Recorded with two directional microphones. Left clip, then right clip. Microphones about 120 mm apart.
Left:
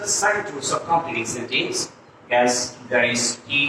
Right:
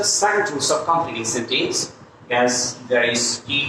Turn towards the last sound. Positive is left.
turn(degrees=20)  # may be behind; listen again after turning